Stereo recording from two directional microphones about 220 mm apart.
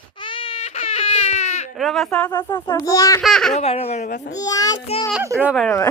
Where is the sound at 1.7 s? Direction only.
Centre (ahead or behind).